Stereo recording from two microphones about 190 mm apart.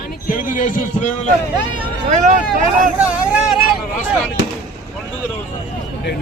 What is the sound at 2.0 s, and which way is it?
Speech, 40° right (ahead or behind).